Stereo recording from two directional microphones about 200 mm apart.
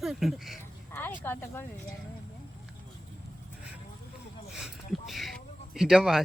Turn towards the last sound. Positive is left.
turn(degrees=0)  # may be behind; listen again after turning